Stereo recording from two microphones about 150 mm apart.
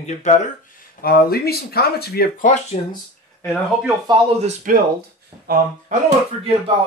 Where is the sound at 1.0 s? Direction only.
85° left.